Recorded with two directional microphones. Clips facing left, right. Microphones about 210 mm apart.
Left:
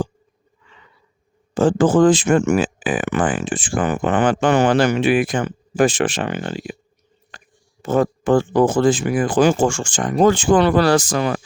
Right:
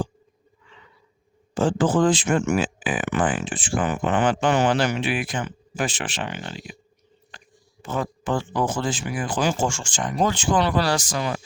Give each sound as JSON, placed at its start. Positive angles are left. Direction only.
{"t": 1.5, "sound": "speech", "side_deg": 50}